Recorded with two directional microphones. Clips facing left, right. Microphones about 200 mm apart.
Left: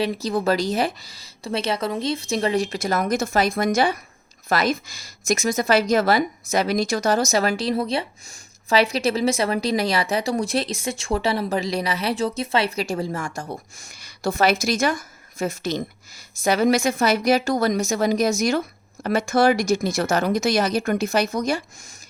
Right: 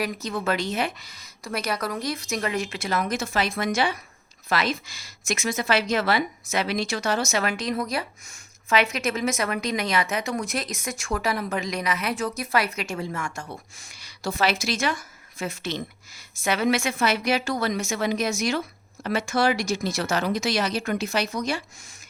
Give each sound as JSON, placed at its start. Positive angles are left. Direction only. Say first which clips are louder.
{"t": 0.0, "sound": "a woman's voice", "louder": "left 5 dB", "side_deg": 30}